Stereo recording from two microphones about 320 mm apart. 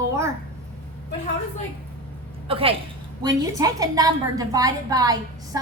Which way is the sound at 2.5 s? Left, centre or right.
Centre.